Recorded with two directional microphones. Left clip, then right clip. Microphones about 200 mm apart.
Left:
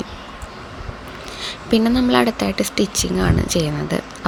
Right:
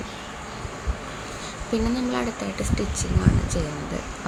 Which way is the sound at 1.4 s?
45° left (ahead or behind).